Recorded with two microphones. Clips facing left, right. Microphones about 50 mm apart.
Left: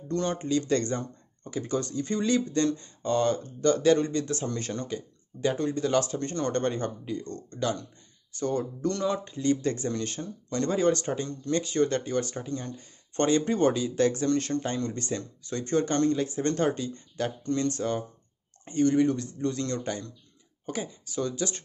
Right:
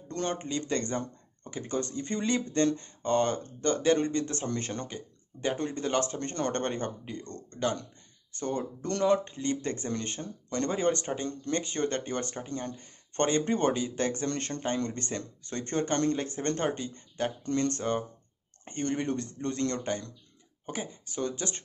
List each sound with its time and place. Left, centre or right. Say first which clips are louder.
0.1 s speech: left 4 dB; right
0.5 s speech: left 5 dB; right
9.2 s speech: left 5 dB; right
11.2 s speech: left 2 dB; right
17.5 s speech: left 1 dB; right